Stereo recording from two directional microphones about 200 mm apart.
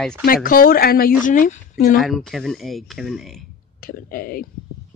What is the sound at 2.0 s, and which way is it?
Speech, centre (ahead or behind).